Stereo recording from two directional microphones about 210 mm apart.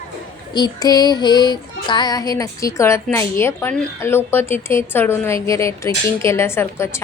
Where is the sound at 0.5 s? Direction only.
20° left (ahead or behind).